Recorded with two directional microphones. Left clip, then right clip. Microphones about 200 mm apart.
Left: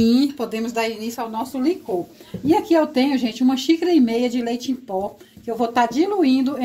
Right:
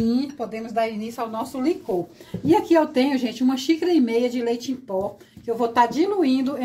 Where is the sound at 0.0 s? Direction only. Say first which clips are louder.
Left 6 dB; 45° left (ahead or behind).